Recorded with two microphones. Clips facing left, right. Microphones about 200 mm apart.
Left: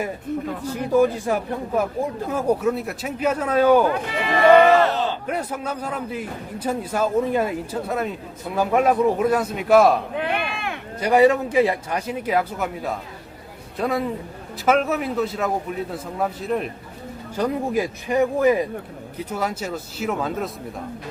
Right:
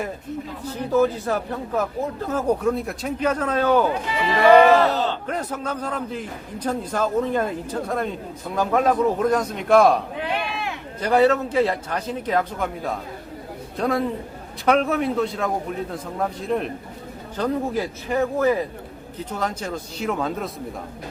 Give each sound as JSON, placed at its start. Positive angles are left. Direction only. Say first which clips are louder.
{"t": 0.6, "sound": "speech", "louder": "left 1 dB", "side_deg": 10}
{"t": 3.8, "sound": "speech", "louder": "even", "side_deg": 55}
{"t": 5.2, "sound": "speech", "louder": "left 1 dB", "side_deg": 10}
{"t": 10.2, "sound": "a sound", "louder": "left 1 dB", "side_deg": 55}
{"t": 11.0, "sound": "a man's voice", "louder": "left 2 dB", "side_deg": 10}
{"t": 17.3, "sound": "a man's voice", "louder": "left 1 dB", "side_deg": 15}